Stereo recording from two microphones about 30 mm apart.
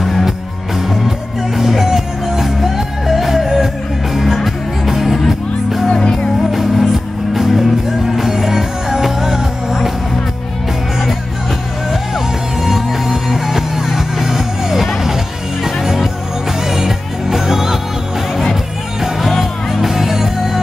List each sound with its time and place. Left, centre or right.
0.7 s music: centre
5.9 s music: left
6.5 s music: centre
12.5 s music: centre